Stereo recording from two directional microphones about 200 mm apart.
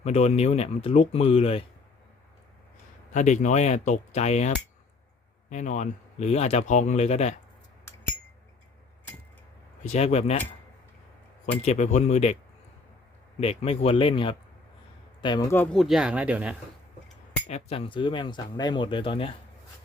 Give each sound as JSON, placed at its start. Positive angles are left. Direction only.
{"t": 0.0, "sound": "speech", "side_deg": 30}
{"t": 3.1, "sound": "speech", "side_deg": 35}
{"t": 9.8, "sound": "speech", "side_deg": 35}
{"t": 11.6, "sound": "speech", "side_deg": 35}
{"t": 13.4, "sound": "speech", "side_deg": 30}
{"t": 17.5, "sound": "speech", "side_deg": 30}